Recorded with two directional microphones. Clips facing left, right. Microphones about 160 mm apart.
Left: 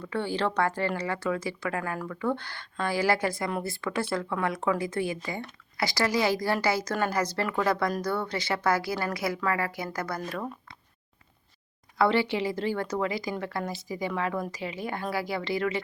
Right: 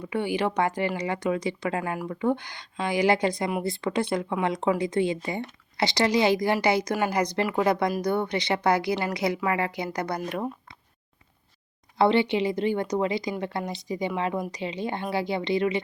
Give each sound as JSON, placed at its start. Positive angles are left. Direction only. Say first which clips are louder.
{"t": 0.1, "sound": "speech", "louder": "right 2 dB", "side_deg": -15}
{"t": 11.9, "sound": "speech", "louder": "right 3 dB", "side_deg": -20}